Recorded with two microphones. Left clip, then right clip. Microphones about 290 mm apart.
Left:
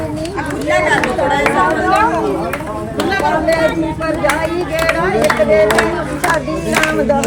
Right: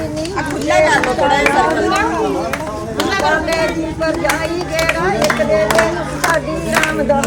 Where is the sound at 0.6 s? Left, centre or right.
Right.